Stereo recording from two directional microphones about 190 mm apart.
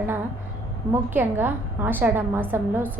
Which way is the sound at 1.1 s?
10° right (ahead or behind).